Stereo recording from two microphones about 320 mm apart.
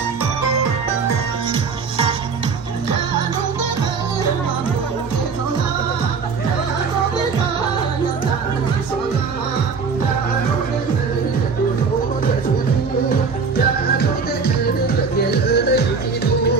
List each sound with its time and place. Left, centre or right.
15.3 s music: left